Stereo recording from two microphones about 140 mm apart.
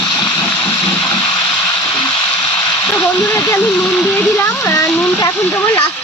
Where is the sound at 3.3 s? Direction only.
25° left (ahead or behind).